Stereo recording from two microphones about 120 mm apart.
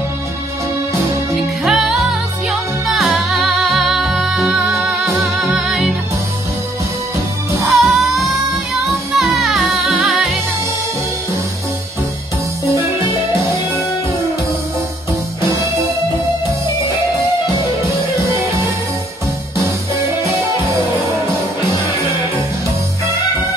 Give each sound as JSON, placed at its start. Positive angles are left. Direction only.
{"t": 1.3, "sound": "music", "side_deg": -5}
{"t": 7.6, "sound": "music", "side_deg": 0}
{"t": 12.6, "sound": "music", "side_deg": -25}